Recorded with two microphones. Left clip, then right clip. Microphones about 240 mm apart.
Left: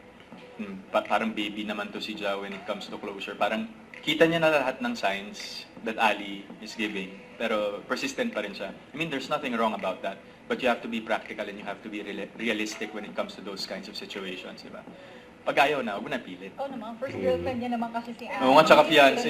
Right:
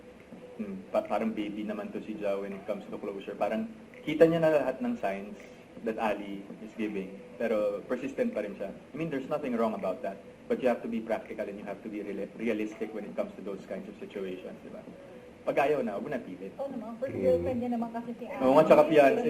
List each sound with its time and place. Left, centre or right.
0.9 s a man's voice: centre
15.4 s a man's voice: centre